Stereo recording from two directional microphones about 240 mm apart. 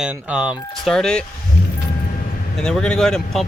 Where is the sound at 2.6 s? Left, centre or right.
Centre.